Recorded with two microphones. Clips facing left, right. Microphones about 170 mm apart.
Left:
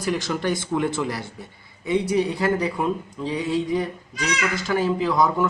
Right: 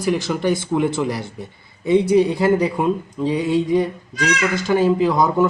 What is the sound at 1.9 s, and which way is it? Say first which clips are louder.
Speech: right 7 dB; 25° right (ahead or behind).